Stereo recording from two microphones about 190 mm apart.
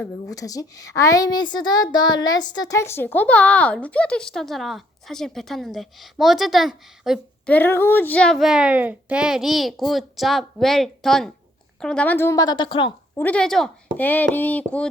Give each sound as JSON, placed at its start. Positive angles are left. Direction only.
{"t": 0.3, "sound": "a woman's voice", "side_deg": 20}
{"t": 13.1, "sound": "a woman's voice", "side_deg": 5}